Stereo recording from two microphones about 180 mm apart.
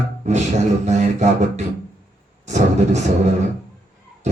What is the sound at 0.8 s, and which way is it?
Speech, 40° right (ahead or behind).